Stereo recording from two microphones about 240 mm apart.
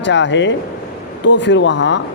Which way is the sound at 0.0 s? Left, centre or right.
Left.